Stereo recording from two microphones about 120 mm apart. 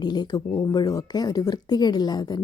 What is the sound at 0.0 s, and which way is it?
A woman's voice, 35° left (ahead or behind).